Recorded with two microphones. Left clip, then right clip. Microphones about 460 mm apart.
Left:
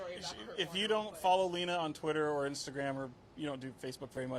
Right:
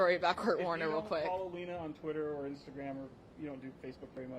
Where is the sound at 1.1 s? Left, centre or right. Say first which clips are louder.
Right 4 dB; right.